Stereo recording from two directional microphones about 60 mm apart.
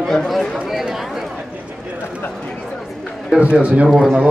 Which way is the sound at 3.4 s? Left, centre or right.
Right.